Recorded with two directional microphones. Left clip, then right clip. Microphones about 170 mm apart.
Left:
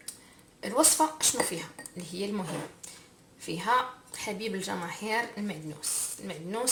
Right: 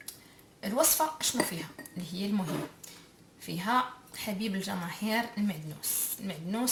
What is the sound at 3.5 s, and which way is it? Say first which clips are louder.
Speech: left 2 dB; 25° left (ahead or behind).